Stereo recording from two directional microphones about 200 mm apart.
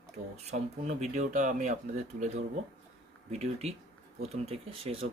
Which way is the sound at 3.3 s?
35° right (ahead or behind).